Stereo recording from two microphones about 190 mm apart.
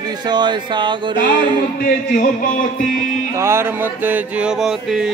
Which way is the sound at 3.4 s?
15° right (ahead or behind).